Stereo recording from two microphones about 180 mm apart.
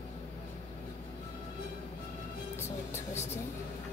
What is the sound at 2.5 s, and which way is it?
Music, 15° left (ahead or behind).